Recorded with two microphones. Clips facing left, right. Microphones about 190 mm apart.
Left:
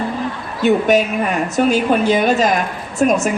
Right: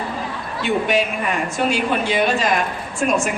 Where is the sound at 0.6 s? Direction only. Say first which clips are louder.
Left 6 dB; 45° left (ahead or behind).